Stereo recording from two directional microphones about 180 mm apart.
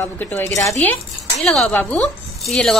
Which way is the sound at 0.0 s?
15° left (ahead or behind).